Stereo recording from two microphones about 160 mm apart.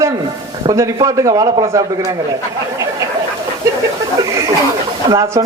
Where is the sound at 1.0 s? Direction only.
20° right (ahead or behind).